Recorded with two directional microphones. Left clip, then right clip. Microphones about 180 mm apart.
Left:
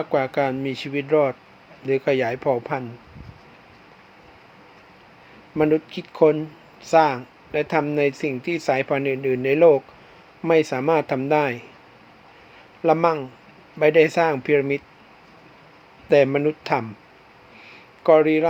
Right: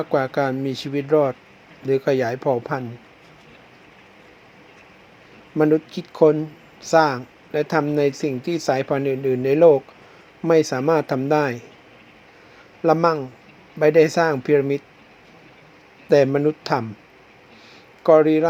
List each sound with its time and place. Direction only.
0.0 s speech: 30° right (ahead or behind)
5.5 s speech: 25° right (ahead or behind)
12.8 s speech: 25° right (ahead or behind)
16.0 s speech: 25° right (ahead or behind)
18.0 s speech: 25° right (ahead or behind)